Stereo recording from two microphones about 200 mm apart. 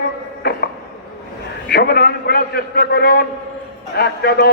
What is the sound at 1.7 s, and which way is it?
A man's voice, 50° left (ahead or behind).